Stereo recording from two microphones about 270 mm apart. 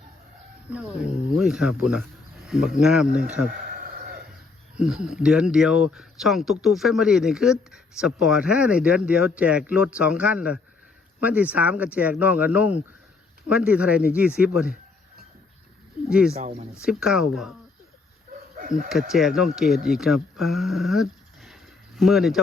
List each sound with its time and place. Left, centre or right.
0.7 s speech: centre
3.4 s a sound: right
4.8 s speech: centre
16.0 s speech: centre
16.4 s speech: right
16.8 s speech: centre
18.9 s speech: centre
20.4 s a sound: centre